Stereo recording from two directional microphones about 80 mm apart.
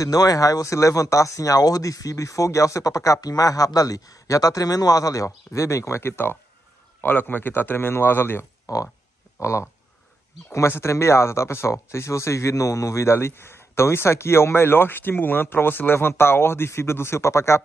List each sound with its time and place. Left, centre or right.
0.0 s a man's voice: left
8.7 s a sound: left
9.4 s speech: left